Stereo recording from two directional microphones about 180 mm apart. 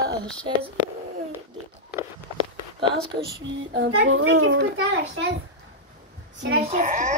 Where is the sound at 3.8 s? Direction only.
90° right.